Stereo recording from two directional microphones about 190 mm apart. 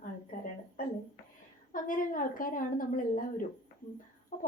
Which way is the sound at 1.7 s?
45° left (ahead or behind).